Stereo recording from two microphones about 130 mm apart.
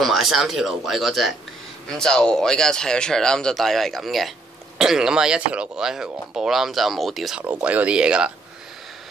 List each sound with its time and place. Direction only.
0.0 s speech: centre (ahead or behind)